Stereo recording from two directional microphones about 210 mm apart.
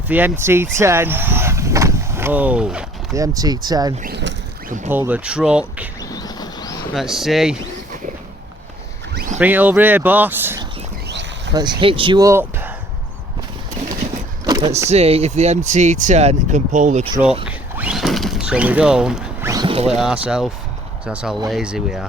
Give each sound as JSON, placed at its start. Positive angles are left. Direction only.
{"t": 0.1, "sound": "speech", "side_deg": -10}
{"t": 3.2, "sound": "speech", "side_deg": -15}
{"t": 4.0, "sound": "boat", "side_deg": -55}
{"t": 4.9, "sound": "speech", "side_deg": -10}
{"t": 6.0, "sound": "a sound", "side_deg": 20}
{"t": 6.9, "sound": "speech", "side_deg": 0}
{"t": 9.1, "sound": "a sound", "side_deg": -40}
{"t": 9.4, "sound": "speech", "side_deg": -10}
{"t": 11.1, "sound": "a sound", "side_deg": -55}
{"t": 11.5, "sound": "speech", "side_deg": -20}
{"t": 14.8, "sound": "speech", "side_deg": -30}
{"t": 17.4, "sound": "mechanisms", "side_deg": -5}
{"t": 19.9, "sound": "speech", "side_deg": 0}